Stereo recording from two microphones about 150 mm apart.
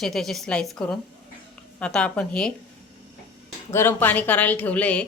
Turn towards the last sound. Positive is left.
turn(degrees=10)  # may be behind; listen again after turning